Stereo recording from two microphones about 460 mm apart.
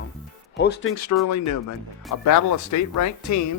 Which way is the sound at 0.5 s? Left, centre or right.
Left.